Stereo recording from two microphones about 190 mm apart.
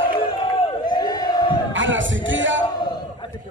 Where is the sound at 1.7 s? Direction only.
80° right.